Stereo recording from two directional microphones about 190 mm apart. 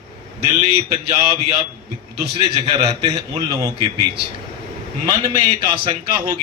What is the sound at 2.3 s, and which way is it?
A man's voice, 30° right (ahead or behind).